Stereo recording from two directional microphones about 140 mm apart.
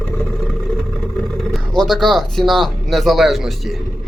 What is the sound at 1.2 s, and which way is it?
A man's voice, centre (ahead or behind).